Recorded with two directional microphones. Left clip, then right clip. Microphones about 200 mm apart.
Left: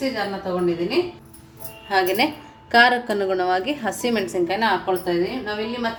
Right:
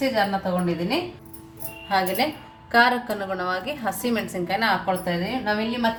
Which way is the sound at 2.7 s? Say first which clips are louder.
Left 3 dB; 20° left (ahead or behind).